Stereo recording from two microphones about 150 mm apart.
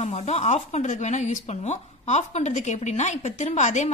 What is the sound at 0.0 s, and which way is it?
Speech, 50° left (ahead or behind).